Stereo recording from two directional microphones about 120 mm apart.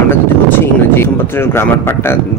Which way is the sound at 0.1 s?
20° left (ahead or behind).